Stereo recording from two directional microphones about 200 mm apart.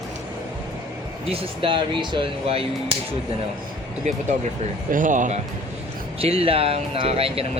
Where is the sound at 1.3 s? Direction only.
25° right (ahead or behind).